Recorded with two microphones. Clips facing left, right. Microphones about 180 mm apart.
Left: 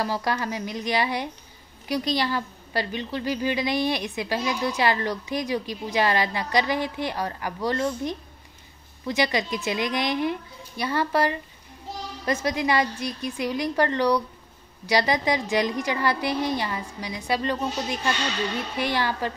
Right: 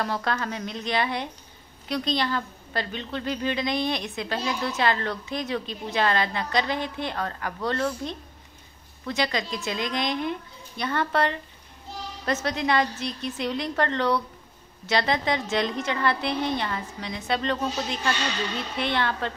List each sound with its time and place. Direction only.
0.0 s a woman's voice: 10° left (ahead or behind)
9.0 s a woman's voice: 15° left (ahead or behind)